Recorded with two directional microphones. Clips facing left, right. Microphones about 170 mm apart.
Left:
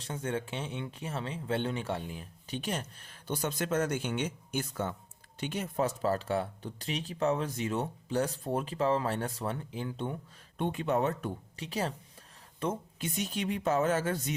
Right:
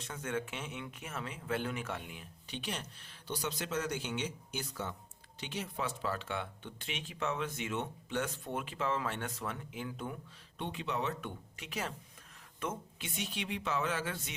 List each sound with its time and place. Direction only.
0.0 s speech: 30° left (ahead or behind)
10.6 s speech: 50° left (ahead or behind)
11.3 s speech: 35° left (ahead or behind)